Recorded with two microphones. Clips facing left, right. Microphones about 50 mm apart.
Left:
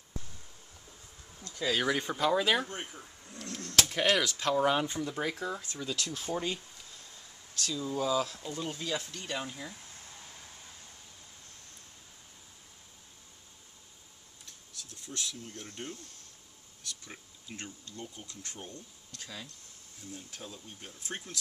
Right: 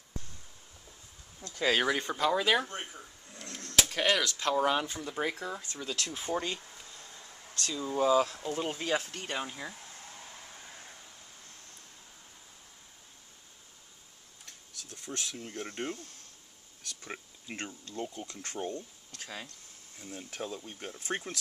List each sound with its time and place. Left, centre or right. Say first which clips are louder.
1.9 s speech: even; centre
3.6 s a sound: even; centre
4.2 s speech: left 1 dB; centre
4.5 s speech: even; centre
5.0 s speech: even; centre
6.1 s speech: right 4 dB; centre
7.6 s speech: right 4 dB; right
14.4 s a sound: even; right
16.8 s speech: right 4 dB; right
20.4 s speech: right 8 dB; right
20.8 s speech: right 6 dB; right